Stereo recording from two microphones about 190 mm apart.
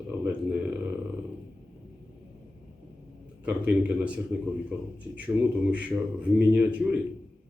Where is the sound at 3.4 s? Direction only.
5° right (ahead or behind).